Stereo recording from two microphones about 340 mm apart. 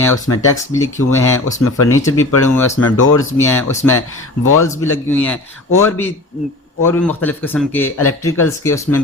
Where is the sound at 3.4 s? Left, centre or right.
Centre.